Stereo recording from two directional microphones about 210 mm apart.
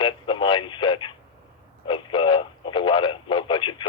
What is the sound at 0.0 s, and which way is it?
Radio, 25° left (ahead or behind).